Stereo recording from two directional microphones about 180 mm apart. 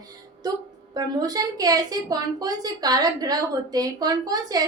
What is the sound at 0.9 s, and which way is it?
A woman's voice, 20° right (ahead or behind).